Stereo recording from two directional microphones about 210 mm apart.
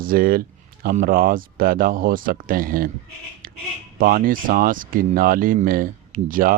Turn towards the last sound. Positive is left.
turn(degrees=-40)  # may be behind; listen again after turning